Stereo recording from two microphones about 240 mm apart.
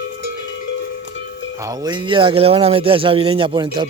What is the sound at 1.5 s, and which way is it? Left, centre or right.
Speech, centre.